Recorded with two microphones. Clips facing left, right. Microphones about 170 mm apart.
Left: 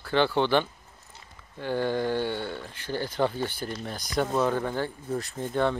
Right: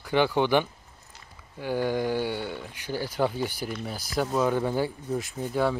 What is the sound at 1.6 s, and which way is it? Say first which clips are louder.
Speech: even; 10° right (ahead or behind).